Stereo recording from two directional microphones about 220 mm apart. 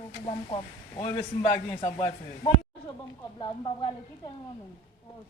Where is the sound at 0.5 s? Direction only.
25° left (ahead or behind).